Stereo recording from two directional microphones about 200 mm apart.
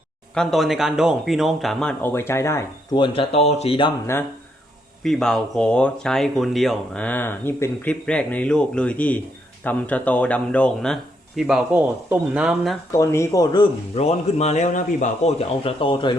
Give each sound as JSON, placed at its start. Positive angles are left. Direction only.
{"t": 0.3, "sound": "speech", "side_deg": 0}
{"t": 5.0, "sound": "speech", "side_deg": 0}
{"t": 12.9, "sound": "a man's voice", "side_deg": 15}